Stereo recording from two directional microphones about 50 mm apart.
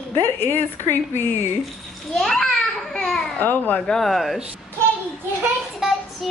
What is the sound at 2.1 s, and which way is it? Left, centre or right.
Children playing, centre.